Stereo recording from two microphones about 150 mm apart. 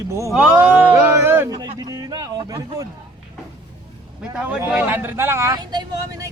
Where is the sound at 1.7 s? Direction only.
25° right (ahead or behind).